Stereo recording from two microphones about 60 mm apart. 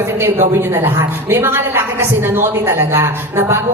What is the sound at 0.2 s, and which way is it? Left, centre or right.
A woman's voice, right.